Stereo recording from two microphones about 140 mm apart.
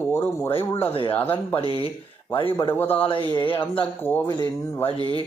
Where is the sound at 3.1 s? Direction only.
35° left (ahead or behind).